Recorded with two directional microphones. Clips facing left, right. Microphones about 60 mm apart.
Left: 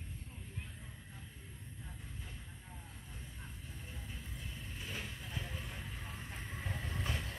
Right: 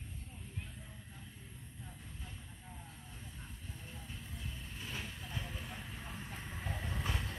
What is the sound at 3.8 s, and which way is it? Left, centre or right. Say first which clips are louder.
Vehicle: even; centre.